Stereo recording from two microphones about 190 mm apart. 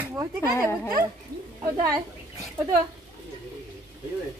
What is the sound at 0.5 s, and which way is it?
Speech, 15° left (ahead or behind).